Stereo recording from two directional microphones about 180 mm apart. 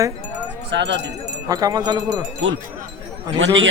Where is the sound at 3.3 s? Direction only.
90° right.